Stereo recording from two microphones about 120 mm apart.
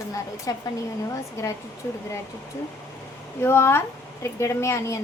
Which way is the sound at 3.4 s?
20° left (ahead or behind).